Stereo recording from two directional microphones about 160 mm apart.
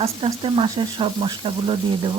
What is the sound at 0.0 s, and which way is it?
Speech, 35° right (ahead or behind).